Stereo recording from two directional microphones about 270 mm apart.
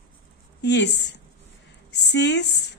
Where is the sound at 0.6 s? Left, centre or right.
Left.